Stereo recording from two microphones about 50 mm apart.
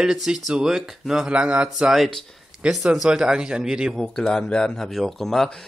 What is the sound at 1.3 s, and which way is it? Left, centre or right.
Speech, right.